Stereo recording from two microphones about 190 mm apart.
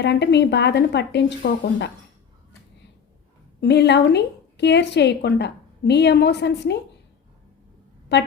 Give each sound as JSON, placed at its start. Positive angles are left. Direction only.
{"t": 0.0, "sound": "a woman's voice", "side_deg": 65}
{"t": 3.6, "sound": "a woman's voice", "side_deg": 60}
{"t": 8.1, "sound": "a woman's voice", "side_deg": 60}